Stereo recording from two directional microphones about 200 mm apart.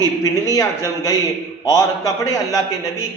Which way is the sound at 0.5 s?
15° left (ahead or behind).